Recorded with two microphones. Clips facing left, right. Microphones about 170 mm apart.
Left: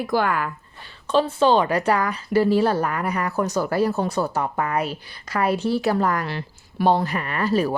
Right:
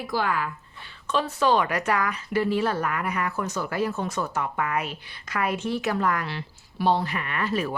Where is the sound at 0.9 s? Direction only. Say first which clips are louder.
Left 6 dB; 30° left (ahead or behind).